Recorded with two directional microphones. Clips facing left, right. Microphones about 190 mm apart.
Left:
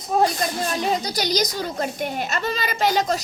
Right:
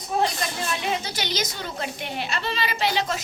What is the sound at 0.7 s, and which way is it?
A woman's voice, 40° left (ahead or behind).